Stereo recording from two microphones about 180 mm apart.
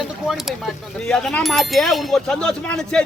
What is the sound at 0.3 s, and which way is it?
Speech, centre (ahead or behind).